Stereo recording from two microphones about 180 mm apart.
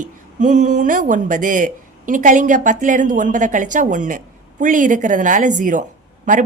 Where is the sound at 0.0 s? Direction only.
45° right (ahead or behind).